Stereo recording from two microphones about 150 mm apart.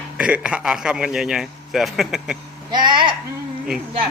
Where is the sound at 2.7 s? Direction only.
30° right (ahead or behind).